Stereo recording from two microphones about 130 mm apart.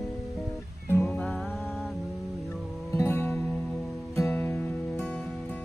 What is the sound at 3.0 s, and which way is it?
Music, 20° left (ahead or behind).